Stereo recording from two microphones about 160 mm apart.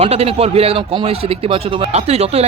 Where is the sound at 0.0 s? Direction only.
40° right (ahead or behind).